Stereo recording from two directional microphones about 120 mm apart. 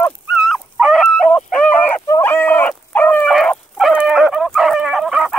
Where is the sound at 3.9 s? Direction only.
5° right (ahead or behind).